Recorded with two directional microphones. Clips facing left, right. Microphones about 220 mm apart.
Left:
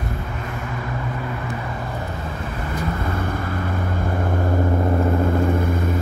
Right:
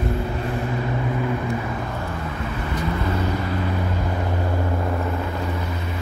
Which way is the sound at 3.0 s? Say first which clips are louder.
Right 1 dB; 50° left (ahead or behind).